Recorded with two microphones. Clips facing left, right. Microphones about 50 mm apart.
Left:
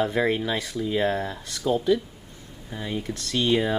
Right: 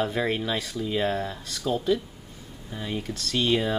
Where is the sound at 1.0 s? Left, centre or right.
Centre.